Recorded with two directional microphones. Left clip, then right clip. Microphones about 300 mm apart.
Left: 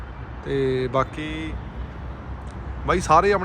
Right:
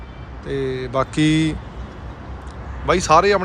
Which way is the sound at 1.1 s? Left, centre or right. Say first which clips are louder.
Right 13 dB; centre.